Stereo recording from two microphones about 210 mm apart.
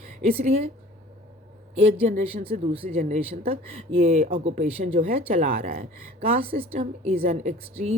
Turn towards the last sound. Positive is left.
turn(degrees=-30)  # may be behind; listen again after turning